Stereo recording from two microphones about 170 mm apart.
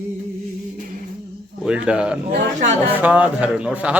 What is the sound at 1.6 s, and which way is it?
Speech, 5° right (ahead or behind).